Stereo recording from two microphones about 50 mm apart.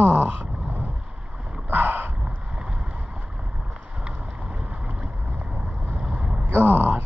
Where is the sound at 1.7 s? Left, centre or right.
Right.